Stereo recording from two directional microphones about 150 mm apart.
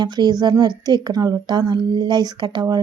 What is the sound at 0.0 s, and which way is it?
Speech, 30° right (ahead or behind).